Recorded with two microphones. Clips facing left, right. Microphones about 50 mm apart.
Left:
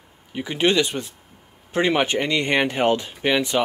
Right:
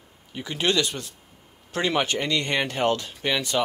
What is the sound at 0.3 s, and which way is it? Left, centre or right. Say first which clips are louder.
Speech: left 5 dB; left.